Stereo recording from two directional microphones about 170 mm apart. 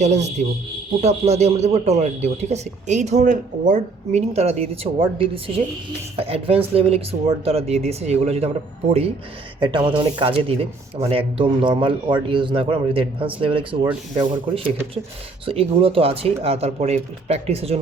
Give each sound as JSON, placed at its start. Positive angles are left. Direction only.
{"t": 0.0, "sound": "speech", "side_deg": -40}
{"t": 9.6, "sound": "speech", "side_deg": -30}